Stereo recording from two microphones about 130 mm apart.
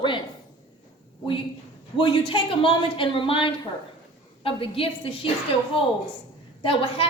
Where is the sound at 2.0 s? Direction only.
40° left (ahead or behind).